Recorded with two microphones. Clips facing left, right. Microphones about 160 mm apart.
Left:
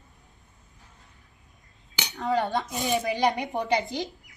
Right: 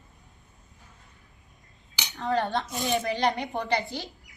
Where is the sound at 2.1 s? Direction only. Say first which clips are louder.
Left 1 dB; 20° left (ahead or behind).